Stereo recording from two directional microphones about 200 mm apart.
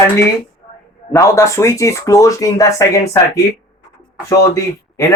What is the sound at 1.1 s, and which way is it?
Speech, 15° left (ahead or behind).